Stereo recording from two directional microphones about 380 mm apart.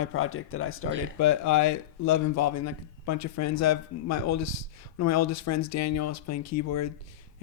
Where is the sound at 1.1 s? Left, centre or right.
Left.